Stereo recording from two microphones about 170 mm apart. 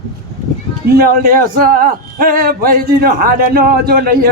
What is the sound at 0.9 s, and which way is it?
A man's voice, 60° right (ahead or behind).